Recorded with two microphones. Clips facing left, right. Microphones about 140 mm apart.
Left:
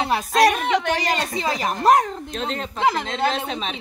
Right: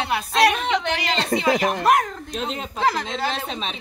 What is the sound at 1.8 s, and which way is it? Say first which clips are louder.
Speech: left 6 dB; 35° left (ahead or behind).